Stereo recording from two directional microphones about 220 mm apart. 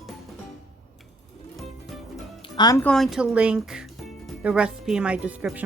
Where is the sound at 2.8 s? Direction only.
Centre (ahead or behind).